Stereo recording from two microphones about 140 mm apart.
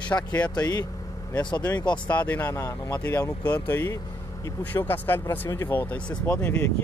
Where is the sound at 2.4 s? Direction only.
20° left (ahead or behind).